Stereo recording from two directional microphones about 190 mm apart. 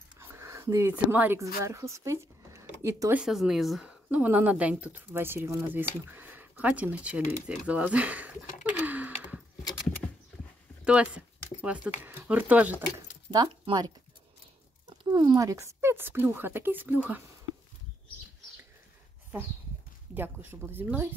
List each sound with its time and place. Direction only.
0.2 s speech: 15° right (ahead or behind)
8.8 s a sound: 10° right (ahead or behind)
10.9 s speech: 5° right (ahead or behind)
13.3 s speech: 25° right (ahead or behind)
15.1 s speech: 20° right (ahead or behind)
20.2 s speech: 10° right (ahead or behind)